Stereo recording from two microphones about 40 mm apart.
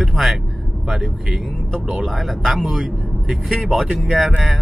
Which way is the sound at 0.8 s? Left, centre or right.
Centre.